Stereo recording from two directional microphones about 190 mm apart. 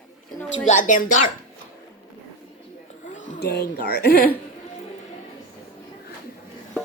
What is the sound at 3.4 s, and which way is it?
Speech, 55° left (ahead or behind).